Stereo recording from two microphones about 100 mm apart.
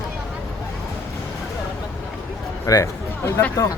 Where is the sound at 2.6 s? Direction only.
30° left (ahead or behind).